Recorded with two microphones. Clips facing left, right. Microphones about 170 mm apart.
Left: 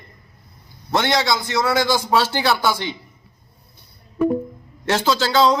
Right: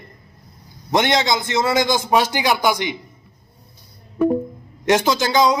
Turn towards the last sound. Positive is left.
turn(degrees=-15)  # may be behind; listen again after turning